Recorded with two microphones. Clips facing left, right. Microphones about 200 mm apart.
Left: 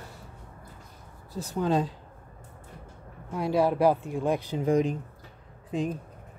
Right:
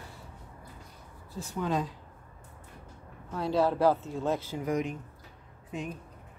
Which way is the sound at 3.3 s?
15° left (ahead or behind).